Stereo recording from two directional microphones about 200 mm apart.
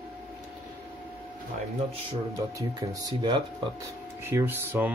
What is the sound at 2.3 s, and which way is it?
A man's voice, 15° right (ahead or behind).